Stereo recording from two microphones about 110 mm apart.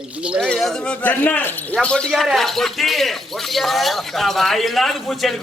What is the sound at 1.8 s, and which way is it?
Speech, 10° left (ahead or behind).